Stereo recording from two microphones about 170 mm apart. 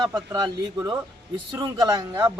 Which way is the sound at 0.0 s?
20° right (ahead or behind).